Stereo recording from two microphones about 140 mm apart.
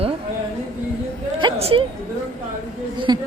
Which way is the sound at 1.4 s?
40° right (ahead or behind).